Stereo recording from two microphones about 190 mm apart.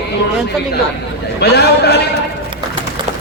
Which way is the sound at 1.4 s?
60° left (ahead or behind).